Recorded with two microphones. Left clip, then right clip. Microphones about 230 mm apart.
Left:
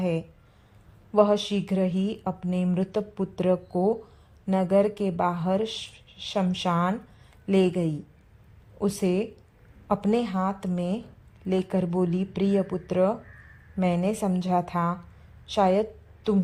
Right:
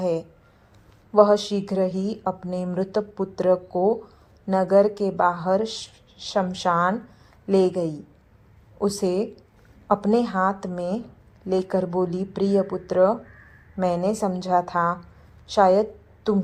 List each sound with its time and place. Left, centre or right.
0.0 s a woman's voice: left